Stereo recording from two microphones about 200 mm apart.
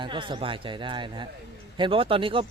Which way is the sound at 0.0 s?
25° right (ahead or behind).